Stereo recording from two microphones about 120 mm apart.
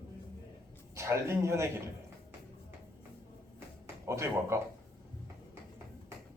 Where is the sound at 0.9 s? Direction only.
25° right (ahead or behind).